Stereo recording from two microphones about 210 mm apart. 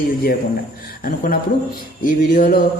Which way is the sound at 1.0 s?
40° left (ahead or behind).